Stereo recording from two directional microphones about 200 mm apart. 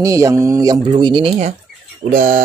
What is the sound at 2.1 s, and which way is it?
Speech, 40° right (ahead or behind).